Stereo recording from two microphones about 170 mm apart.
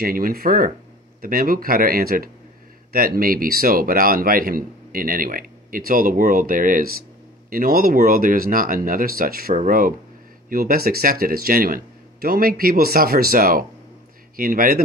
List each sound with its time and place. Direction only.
0.0 s a man's voice: 60° right (ahead or behind)